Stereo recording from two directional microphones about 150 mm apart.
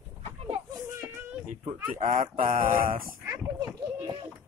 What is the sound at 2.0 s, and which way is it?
Speech, 65° right (ahead or behind).